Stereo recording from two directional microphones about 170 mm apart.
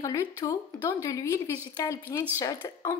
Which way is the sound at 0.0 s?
20° left (ahead or behind).